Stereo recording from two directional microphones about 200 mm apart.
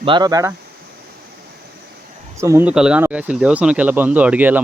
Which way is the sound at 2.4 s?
15° right (ahead or behind).